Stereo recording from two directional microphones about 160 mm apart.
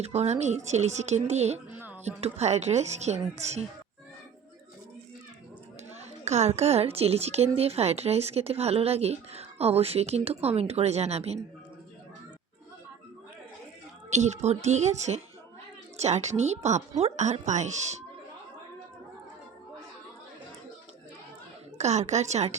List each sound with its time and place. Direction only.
0.0 s a woman's voice: 40° right (ahead or behind)
1.7 s a sound: 10° right (ahead or behind)
2.0 s a woman's voice: 45° right (ahead or behind)
5.9 s a woman's voice: 45° right (ahead or behind)
14.1 s a woman's voice: 45° right (ahead or behind)
21.8 s a woman's voice: 45° right (ahead or behind)